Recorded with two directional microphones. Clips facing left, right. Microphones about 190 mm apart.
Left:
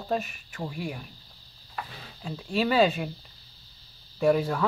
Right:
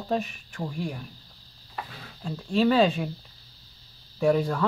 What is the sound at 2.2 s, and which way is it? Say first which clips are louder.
Speech: right 4 dB; 5° left (ahead or behind).